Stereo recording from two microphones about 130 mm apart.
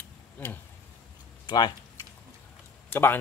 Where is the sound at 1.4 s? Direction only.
35° left (ahead or behind).